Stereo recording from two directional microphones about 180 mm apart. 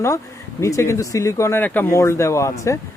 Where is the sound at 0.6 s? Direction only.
15° left (ahead or behind).